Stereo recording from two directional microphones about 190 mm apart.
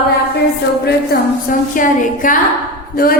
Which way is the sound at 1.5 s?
45° left (ahead or behind).